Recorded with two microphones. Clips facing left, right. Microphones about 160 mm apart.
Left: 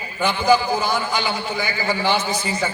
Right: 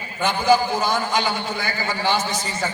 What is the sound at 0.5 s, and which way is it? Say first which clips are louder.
A man's voice: even; 40° right (ahead or behind).